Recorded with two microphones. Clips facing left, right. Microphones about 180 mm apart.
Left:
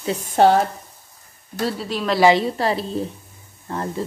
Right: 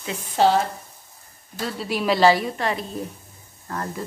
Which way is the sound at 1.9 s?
10° right (ahead or behind).